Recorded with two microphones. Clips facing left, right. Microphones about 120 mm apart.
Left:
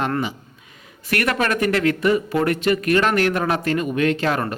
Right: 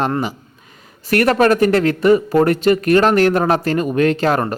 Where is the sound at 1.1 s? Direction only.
35° right (ahead or behind).